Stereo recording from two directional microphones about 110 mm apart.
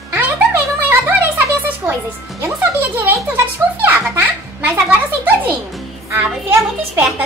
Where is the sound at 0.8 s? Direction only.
20° right (ahead or behind).